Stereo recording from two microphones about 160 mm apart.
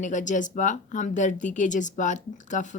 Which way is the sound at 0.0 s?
50° left (ahead or behind).